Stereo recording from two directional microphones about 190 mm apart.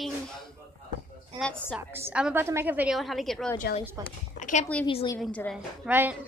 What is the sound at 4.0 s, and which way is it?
Speech, 20° right (ahead or behind).